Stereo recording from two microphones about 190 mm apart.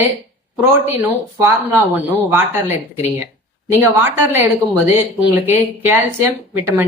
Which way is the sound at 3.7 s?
10° right (ahead or behind).